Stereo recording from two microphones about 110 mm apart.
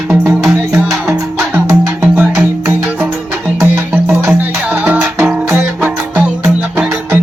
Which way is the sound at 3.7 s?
10° right (ahead or behind).